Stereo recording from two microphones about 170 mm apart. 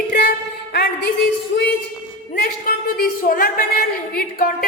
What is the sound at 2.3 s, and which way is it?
A woman's voice, 60° left (ahead or behind).